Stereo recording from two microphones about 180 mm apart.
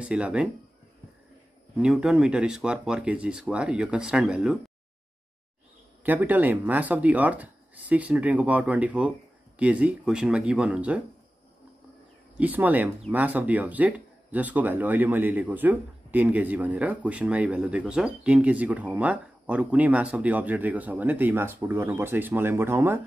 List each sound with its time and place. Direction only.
0.0 s speech: 5° right (ahead or behind)
1.8 s speech: 5° right (ahead or behind)
6.0 s speech: 10° right (ahead or behind)
12.4 s speech: 10° right (ahead or behind)